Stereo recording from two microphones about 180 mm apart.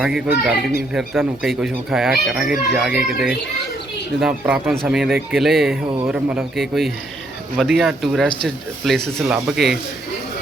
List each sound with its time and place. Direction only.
0.0 s speech: 5° right (ahead or behind)
5.8 s speech: 30° right (ahead or behind)
6.1 s speech: 5° right (ahead or behind)